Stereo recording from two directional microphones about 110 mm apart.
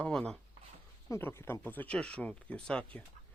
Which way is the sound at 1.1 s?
20° left (ahead or behind).